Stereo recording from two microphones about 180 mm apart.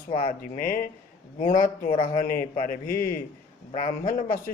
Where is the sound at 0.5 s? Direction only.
50° left (ahead or behind).